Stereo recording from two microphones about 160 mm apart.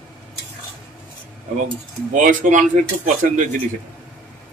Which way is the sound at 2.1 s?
55° right (ahead or behind).